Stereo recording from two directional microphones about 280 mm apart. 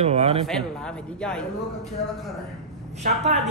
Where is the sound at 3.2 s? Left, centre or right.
Right.